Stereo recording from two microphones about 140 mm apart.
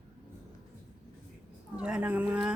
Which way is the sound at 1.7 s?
5° right (ahead or behind).